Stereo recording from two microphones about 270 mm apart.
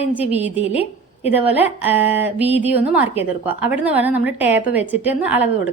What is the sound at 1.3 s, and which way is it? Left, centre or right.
A woman's voice, centre.